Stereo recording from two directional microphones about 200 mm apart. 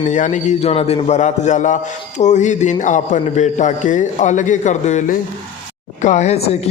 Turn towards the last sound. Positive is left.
turn(degrees=35)  # may be behind; listen again after turning